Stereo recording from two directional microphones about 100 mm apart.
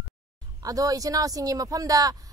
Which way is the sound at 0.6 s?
35° right (ahead or behind).